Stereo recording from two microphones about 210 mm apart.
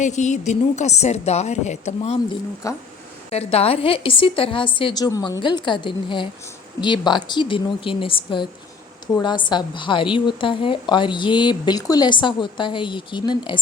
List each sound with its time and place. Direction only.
0.0 s a woman's voice: 35° left (ahead or behind)
2.6 s speech: 15° left (ahead or behind)
3.2 s a woman's voice: 30° left (ahead or behind)